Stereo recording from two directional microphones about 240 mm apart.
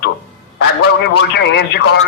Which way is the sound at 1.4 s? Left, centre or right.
Left.